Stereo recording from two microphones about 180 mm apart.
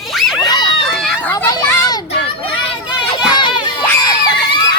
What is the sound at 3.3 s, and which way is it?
Children playing, 25° left (ahead or behind).